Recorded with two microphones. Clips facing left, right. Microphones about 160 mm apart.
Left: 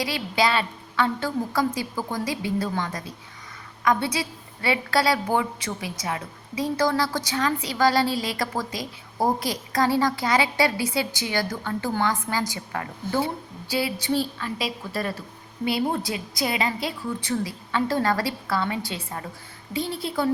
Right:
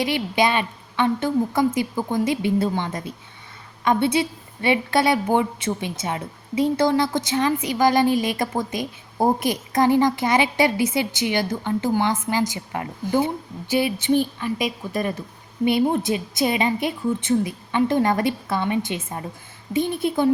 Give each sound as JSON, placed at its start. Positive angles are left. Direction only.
{"t": 0.0, "sound": "a woman's voice", "side_deg": -20}